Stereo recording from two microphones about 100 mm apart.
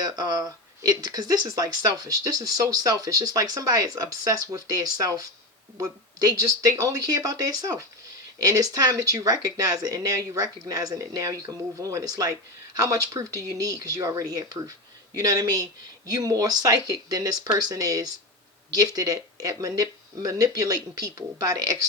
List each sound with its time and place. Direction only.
0.0 s speech: 40° right (ahead or behind)